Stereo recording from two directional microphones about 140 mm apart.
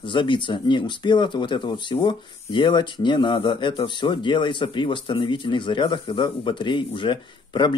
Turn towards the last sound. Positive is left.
turn(degrees=35)  # may be behind; listen again after turning